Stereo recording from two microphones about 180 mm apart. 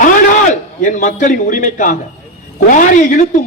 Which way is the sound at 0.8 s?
45° left (ahead or behind).